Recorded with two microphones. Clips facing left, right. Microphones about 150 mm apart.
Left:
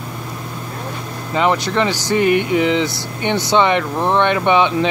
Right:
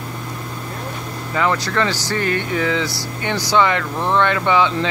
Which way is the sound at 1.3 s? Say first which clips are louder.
Left 3 dB; 20° left (ahead or behind).